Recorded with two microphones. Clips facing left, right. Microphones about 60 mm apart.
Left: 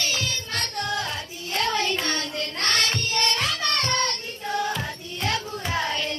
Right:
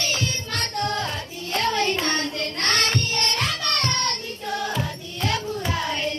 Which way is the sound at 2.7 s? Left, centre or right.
Right.